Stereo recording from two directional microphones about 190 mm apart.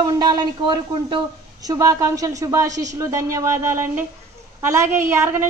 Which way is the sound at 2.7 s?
40° right (ahead or behind).